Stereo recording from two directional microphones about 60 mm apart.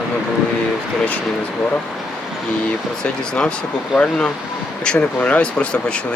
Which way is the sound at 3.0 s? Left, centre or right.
Centre.